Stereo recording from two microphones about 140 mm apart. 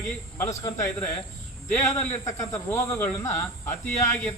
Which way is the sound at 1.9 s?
20° left (ahead or behind).